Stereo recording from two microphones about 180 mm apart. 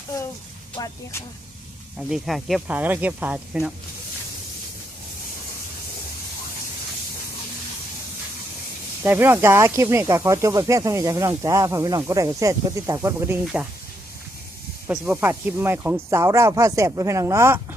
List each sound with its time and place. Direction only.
0.8 s speech: 25° left (ahead or behind)
2.0 s speech: centre (ahead or behind)
9.0 s speech: 10° right (ahead or behind)
14.8 s speech: 10° right (ahead or behind)